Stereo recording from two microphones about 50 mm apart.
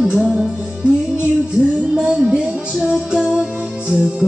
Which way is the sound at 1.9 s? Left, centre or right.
Centre.